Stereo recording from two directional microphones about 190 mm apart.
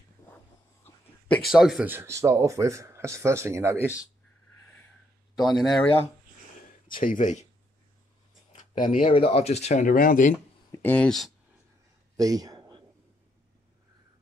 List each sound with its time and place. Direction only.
1.3 s speech: centre (ahead or behind)
5.4 s speech: centre (ahead or behind)
6.9 s speech: 45° left (ahead or behind)
8.8 s speech: 40° left (ahead or behind)
9.1 s speech: 30° left (ahead or behind)
10.7 s speech: 10° left (ahead or behind)
12.2 s speech: 20° right (ahead or behind)